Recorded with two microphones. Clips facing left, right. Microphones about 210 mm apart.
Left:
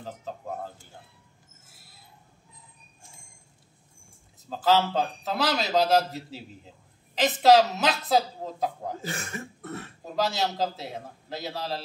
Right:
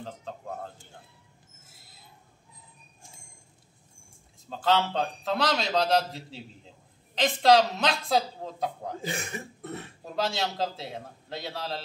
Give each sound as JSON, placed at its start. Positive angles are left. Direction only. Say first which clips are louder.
{"t": 4.5, "sound": "a man's voice", "louder": "left 2 dB", "side_deg": 5}
{"t": 9.0, "sound": "cough", "louder": "right 1 dB", "side_deg": -15}
{"t": 10.1, "sound": "a man's voice", "louder": "left 2 dB", "side_deg": 0}